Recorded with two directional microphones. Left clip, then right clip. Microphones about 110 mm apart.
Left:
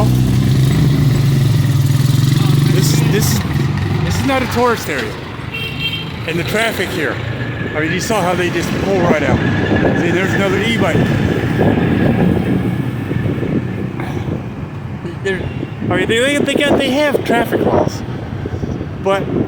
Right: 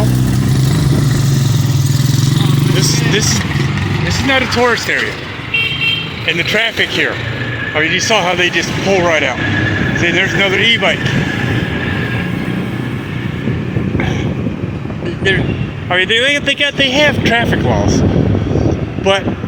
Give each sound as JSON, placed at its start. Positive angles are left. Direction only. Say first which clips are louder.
{"t": 2.8, "sound": "vehicle", "louder": "right 3 dB", "side_deg": 50}
{"t": 4.3, "sound": "speech", "louder": "right 2 dB", "side_deg": 50}
{"t": 6.2, "sound": "speech", "louder": "right 3 dB", "side_deg": 35}
{"t": 15.9, "sound": "speech", "louder": "right 3 dB", "side_deg": 30}